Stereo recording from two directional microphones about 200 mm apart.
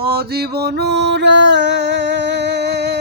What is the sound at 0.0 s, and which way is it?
Music, 50° right (ahead or behind).